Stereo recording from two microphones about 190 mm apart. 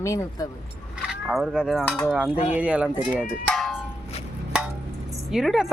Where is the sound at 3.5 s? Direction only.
Centre (ahead or behind).